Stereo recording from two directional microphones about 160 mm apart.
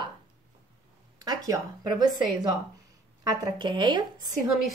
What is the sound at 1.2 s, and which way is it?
Speech, 25° right (ahead or behind).